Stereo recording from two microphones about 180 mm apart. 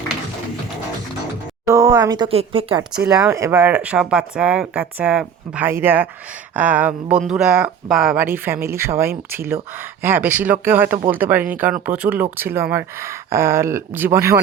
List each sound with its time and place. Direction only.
1.6 s speech: 20° right (ahead or behind)
3.1 s speech: 5° right (ahead or behind)